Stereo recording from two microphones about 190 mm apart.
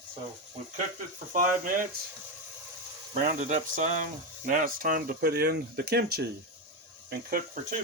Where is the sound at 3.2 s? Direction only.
40° right (ahead or behind).